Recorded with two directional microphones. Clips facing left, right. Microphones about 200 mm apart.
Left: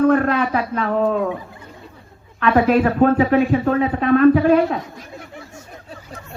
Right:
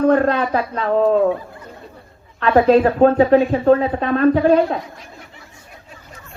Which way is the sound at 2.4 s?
30° right (ahead or behind).